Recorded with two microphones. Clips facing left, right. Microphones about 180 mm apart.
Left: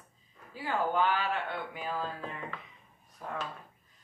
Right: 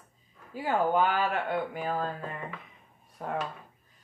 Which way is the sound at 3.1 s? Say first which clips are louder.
Right 6 dB; 60° right (ahead or behind).